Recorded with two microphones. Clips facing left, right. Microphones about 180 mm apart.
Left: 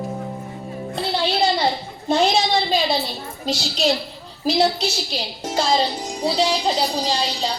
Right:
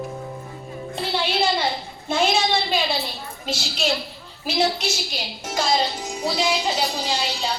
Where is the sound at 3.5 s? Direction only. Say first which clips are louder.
Left 4 dB; 35° left (ahead or behind).